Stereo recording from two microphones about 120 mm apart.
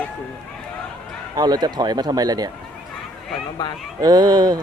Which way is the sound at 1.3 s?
35° right (ahead or behind).